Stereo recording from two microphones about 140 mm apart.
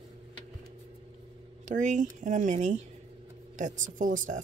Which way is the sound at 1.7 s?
60° right (ahead or behind).